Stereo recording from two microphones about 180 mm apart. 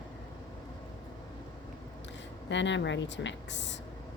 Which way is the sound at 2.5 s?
85° left.